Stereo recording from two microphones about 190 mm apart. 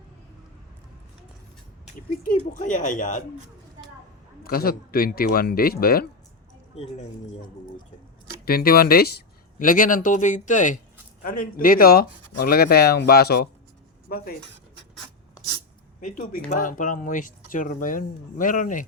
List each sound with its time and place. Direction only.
2.2 s speech: 45° left (ahead or behind)
4.4 s speech: 50° left (ahead or behind)
6.7 s speech: 35° left (ahead or behind)
8.4 s speech: 50° left (ahead or behind)
16.0 s speech: 45° left (ahead or behind)